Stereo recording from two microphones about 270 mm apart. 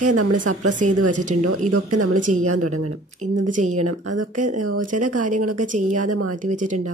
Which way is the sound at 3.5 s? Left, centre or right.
Right.